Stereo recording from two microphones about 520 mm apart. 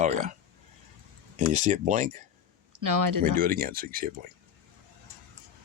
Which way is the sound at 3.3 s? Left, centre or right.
Centre.